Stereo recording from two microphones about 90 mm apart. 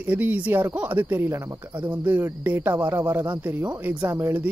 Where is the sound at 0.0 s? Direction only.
20° right (ahead or behind).